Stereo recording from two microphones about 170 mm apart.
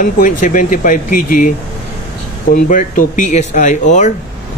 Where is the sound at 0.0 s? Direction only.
50° left (ahead or behind).